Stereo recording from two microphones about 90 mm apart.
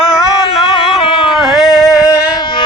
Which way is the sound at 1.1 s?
90° left.